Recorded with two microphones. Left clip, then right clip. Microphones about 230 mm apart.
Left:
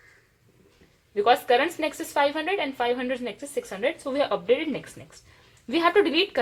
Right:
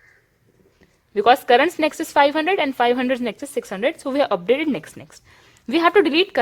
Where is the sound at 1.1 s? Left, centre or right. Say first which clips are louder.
Right 6 dB; right.